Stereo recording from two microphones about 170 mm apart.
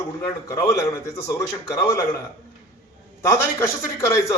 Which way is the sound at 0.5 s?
15° left (ahead or behind).